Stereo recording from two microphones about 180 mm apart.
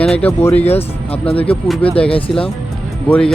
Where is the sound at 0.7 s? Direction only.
35° left (ahead or behind).